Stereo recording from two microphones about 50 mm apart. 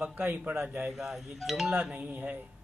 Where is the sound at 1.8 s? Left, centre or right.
Right.